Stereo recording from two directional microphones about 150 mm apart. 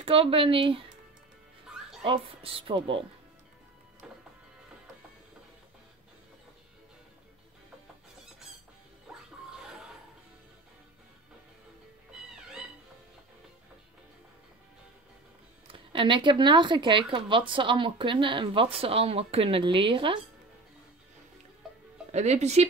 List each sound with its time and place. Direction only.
0.0 s speech: 40° right (ahead or behind)
2.0 s speech: 40° right (ahead or behind)
15.7 s speech: 35° right (ahead or behind)
22.1 s speech: 50° right (ahead or behind)